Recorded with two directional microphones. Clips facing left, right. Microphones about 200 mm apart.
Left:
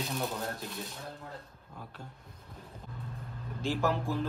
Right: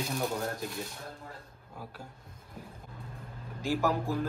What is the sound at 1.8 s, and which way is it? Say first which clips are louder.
Speech: right 2 dB; 10° right (ahead or behind).